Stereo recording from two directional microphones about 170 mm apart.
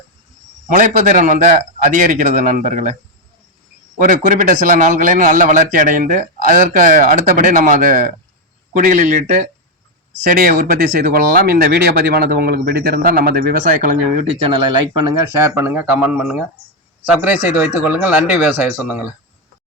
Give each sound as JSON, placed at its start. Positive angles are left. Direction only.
{"t": 0.7, "sound": "a man's voice", "side_deg": -45}
{"t": 3.9, "sound": "a man's voice", "side_deg": -50}
{"t": 14.3, "sound": "speech", "side_deg": -35}
{"t": 15.3, "sound": "speech", "side_deg": -15}